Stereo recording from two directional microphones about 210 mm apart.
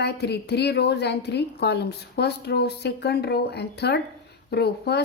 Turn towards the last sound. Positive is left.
turn(degrees=50)  # may be behind; listen again after turning